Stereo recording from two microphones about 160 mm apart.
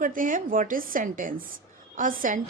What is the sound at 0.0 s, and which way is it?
A woman's voice, 55° right (ahead or behind).